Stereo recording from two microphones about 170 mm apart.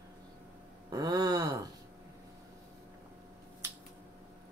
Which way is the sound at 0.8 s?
25° right (ahead or behind).